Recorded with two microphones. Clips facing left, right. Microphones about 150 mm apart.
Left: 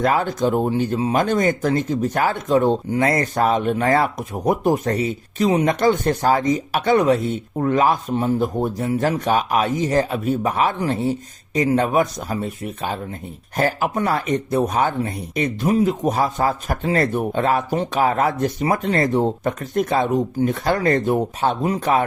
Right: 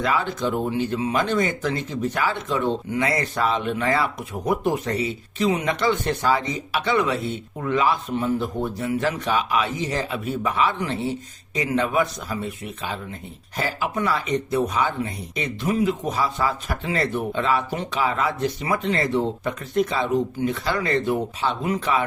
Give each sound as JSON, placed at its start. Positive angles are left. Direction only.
{"t": 0.0, "sound": "speech", "side_deg": 45}